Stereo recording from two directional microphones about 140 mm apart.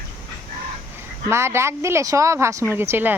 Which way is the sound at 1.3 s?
20° right (ahead or behind).